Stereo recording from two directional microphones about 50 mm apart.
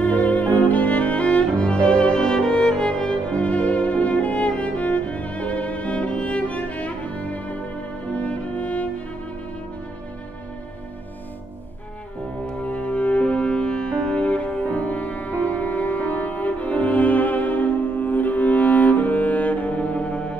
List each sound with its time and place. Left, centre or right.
0.0 s music: left
12.4 s music: left